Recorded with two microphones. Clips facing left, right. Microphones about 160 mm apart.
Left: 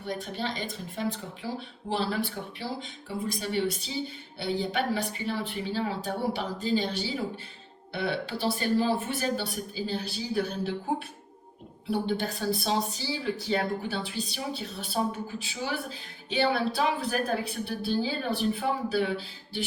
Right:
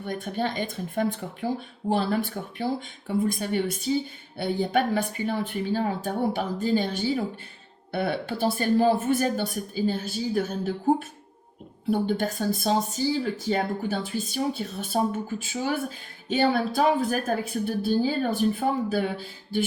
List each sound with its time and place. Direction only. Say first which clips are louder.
0.0 s a woman's voice: right 4 dB; 50° right (ahead or behind)
11.9 s a woman's voice: right 4 dB; 50° right (ahead or behind)